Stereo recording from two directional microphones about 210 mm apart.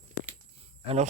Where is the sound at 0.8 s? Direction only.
30° right (ahead or behind).